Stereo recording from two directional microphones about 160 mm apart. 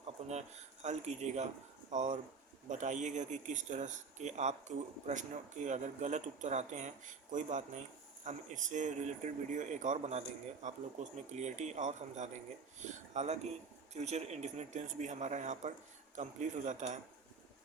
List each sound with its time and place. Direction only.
0.3 s speech: 45° right (ahead or behind)